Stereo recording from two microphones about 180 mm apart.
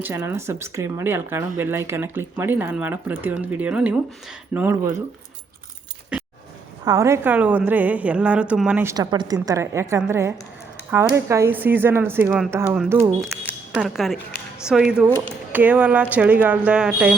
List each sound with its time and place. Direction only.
0.0 s speech: 15° right (ahead or behind)
6.8 s speech: 15° right (ahead or behind)
13.2 s speech: centre (ahead or behind)